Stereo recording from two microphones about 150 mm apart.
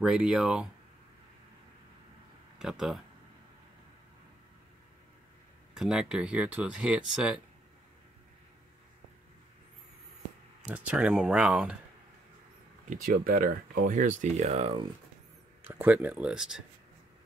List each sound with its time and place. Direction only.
0.0 s speech: 5° right (ahead or behind)
2.6 s speech: 5° right (ahead or behind)
5.8 s speech: 5° right (ahead or behind)
10.7 s speech: 5° right (ahead or behind)
12.9 s speech: 65° right (ahead or behind); by 14.9 s 40° right (ahead or behind)
15.6 s speech: 15° right (ahead or behind)